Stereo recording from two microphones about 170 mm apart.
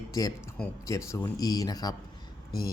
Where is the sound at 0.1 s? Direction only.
20° left (ahead or behind).